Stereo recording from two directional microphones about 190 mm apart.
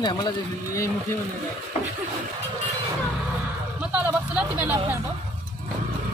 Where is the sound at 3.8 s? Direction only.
5° right (ahead or behind).